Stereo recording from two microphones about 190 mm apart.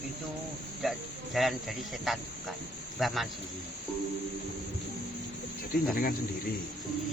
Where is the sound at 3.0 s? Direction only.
Centre (ahead or behind).